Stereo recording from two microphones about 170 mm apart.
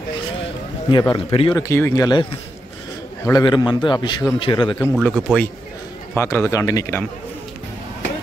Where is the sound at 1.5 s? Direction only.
15° left (ahead or behind).